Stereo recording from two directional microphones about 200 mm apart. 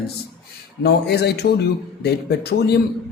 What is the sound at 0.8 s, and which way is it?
Speech, 55° left (ahead or behind).